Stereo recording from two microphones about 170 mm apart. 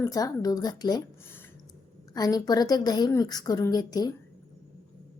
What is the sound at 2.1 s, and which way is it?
A woman's voice, 20° left (ahead or behind).